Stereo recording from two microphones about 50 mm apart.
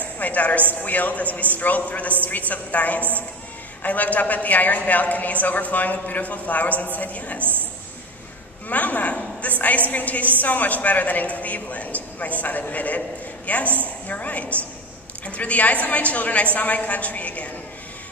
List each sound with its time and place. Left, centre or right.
0.0 s a woman's voice: left
8.6 s a woman's voice: left